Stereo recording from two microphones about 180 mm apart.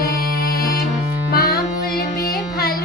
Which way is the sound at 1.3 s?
60° left (ahead or behind).